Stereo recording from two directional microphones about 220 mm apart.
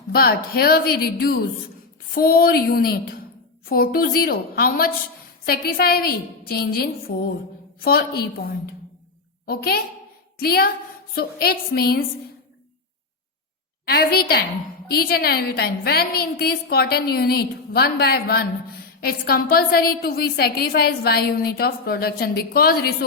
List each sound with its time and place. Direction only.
0.1 s a woman's voice: 45° left (ahead or behind)
9.5 s a woman's voice: 45° left (ahead or behind)
13.8 s a woman's voice: 45° left (ahead or behind)